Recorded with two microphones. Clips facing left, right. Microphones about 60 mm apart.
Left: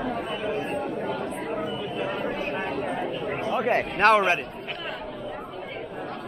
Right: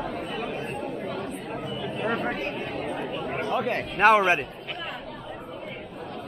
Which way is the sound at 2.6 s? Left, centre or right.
Left.